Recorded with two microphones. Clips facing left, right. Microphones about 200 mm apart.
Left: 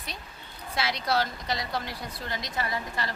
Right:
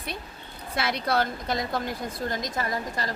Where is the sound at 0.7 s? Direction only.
55° right (ahead or behind).